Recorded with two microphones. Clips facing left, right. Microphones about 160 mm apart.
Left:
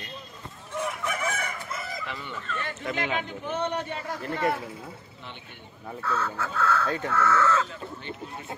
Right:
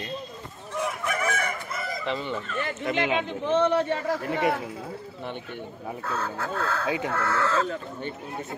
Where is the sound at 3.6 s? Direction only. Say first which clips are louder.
Right 7 dB; 90° right.